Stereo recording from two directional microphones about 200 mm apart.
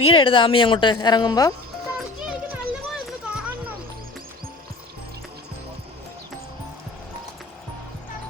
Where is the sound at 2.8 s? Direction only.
5° right (ahead or behind).